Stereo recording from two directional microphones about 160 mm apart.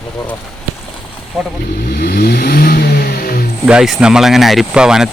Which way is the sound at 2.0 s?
75° left (ahead or behind).